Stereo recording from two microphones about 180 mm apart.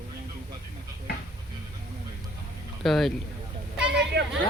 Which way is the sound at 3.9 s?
70° right (ahead or behind).